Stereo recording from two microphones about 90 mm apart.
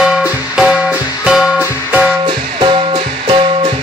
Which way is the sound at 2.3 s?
65° right (ahead or behind).